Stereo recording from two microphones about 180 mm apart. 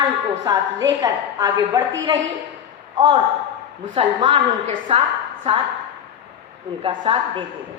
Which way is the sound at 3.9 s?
30° right (ahead or behind).